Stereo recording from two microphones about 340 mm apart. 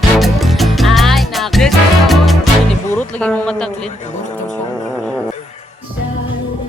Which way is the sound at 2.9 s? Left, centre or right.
Centre.